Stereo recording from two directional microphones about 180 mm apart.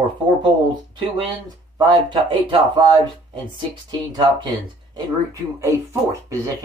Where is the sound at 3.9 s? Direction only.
25° right (ahead or behind).